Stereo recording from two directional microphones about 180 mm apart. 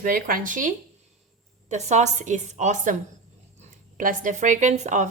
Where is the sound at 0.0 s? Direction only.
50° right (ahead or behind).